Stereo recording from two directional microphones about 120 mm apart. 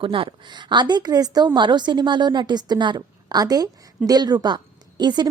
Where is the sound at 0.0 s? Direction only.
45° right (ahead or behind).